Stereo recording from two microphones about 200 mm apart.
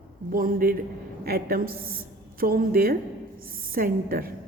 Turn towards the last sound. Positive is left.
turn(degrees=-45)  # may be behind; listen again after turning